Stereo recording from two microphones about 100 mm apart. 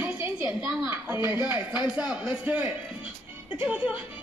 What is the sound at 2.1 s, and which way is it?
Speech, 10° right (ahead or behind).